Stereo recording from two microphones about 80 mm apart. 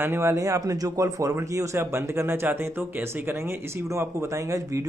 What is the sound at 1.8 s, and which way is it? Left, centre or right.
Speech, right.